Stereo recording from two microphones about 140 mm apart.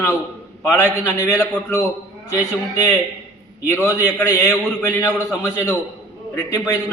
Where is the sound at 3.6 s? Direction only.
15° left (ahead or behind).